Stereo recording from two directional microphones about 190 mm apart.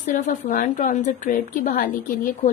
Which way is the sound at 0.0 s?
45° left (ahead or behind).